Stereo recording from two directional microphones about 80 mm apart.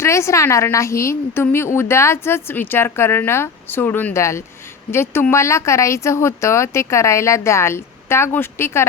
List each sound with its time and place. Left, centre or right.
0.0 s a woman's voice: left
4.1 s a woman's voice: left